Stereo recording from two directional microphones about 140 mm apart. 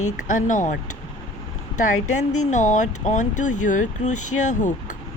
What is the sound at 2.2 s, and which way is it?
Speech, 60° left (ahead or behind).